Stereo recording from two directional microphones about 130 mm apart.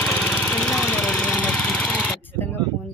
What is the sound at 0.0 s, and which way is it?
Lawn mower, 10° left (ahead or behind).